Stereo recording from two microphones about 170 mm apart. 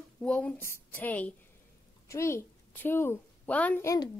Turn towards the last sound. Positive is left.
turn(degrees=15)  # may be behind; listen again after turning